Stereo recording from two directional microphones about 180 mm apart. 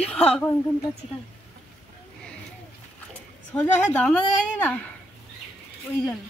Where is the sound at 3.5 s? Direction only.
10° left (ahead or behind).